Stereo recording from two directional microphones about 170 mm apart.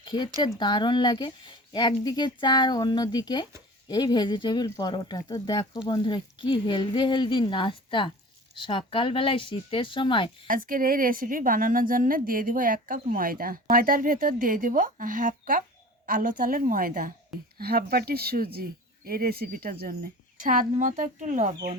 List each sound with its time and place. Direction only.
0.0 s a sound: 25° left (ahead or behind)
0.6 s speech: 25° left (ahead or behind)
10.5 s a woman's voice: 55° right (ahead or behind)